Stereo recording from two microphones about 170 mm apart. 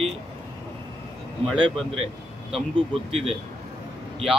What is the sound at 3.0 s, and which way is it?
Speech, 35° right (ahead or behind).